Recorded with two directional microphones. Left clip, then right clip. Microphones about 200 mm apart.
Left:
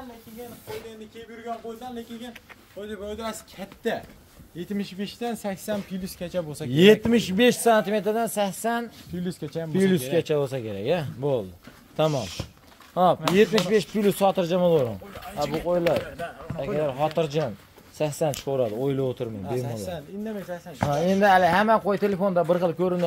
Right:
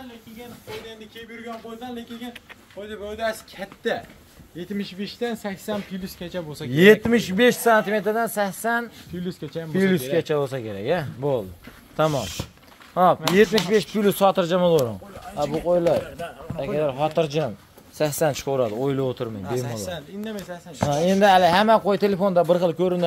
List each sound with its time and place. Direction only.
3.2 s speech: 55° left (ahead or behind)
6.7 s speech: 10° left (ahead or behind)
9.1 s speech: 55° left (ahead or behind)
9.7 s speech: 15° left (ahead or behind)
19.6 s speech: 20° left (ahead or behind)
20.9 s speech: 5° right (ahead or behind)